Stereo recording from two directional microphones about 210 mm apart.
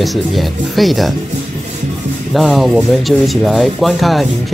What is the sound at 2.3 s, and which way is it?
Speech, centre (ahead or behind).